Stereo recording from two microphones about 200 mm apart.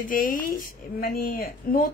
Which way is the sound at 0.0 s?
45° left (ahead or behind).